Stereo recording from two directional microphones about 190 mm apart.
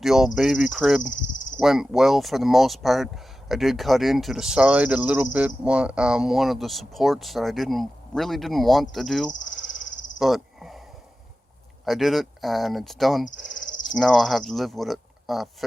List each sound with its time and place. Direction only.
0.0 s speech: centre (ahead or behind)
10.2 s cricket: centre (ahead or behind)
11.9 s speech: centre (ahead or behind)
13.5 s cricket: 45° left (ahead or behind)
13.8 s speech: centre (ahead or behind)